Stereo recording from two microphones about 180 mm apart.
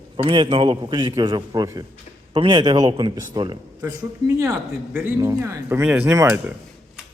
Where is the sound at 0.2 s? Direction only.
25° right (ahead or behind).